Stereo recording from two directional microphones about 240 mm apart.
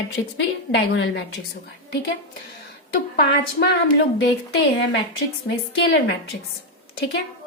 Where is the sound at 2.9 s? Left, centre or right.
Left.